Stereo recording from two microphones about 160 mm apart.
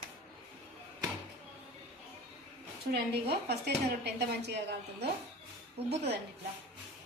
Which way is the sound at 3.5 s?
90° right.